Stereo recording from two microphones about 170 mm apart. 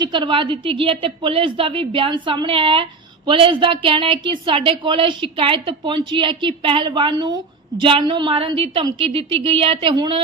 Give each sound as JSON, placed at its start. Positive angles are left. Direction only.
{"t": 0.0, "sound": "a woman's voice", "side_deg": -30}